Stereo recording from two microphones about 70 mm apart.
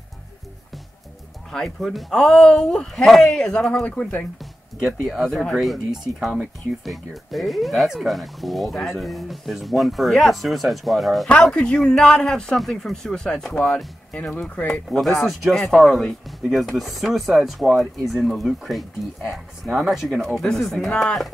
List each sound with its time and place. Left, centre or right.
1.5 s speech: centre
3.8 s speech: centre
4.8 s speech: centre
11.4 s speech: centre
14.4 s speech: left
14.7 s speech: centre
20.4 s speech: centre